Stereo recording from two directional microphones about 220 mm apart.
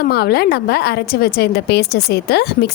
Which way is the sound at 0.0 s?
45° left (ahead or behind).